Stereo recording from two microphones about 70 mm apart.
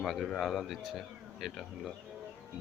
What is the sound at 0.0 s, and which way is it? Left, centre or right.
Speech, centre.